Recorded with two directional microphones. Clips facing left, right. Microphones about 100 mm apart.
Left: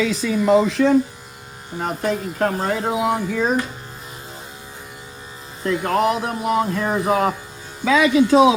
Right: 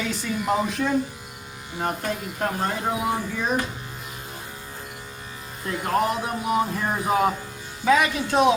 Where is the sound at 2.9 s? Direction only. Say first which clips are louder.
Left 5 dB; 75° left (ahead or behind).